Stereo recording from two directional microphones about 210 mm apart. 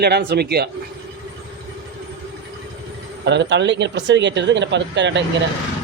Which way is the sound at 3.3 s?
55° right (ahead or behind).